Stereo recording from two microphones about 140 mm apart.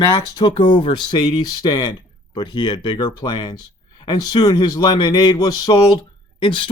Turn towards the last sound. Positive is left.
turn(degrees=35)  # may be behind; listen again after turning